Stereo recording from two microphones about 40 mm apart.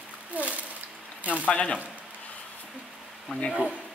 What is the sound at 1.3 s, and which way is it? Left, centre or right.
Speech, left.